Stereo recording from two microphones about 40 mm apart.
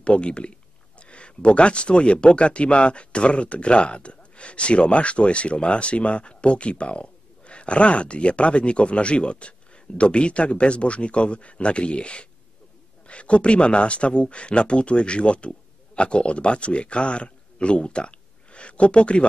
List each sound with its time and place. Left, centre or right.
0.0 s a man's voice: left